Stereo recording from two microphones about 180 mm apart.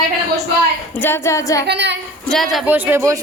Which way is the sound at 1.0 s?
15° left (ahead or behind).